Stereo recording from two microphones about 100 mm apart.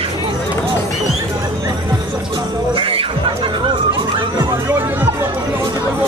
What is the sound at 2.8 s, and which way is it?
Music, 65° right (ahead or behind).